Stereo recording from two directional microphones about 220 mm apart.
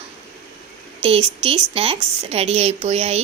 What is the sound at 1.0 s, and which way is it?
A woman's voice, 25° right (ahead or behind).